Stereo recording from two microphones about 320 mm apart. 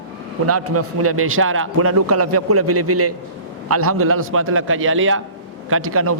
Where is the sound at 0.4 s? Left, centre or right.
Right.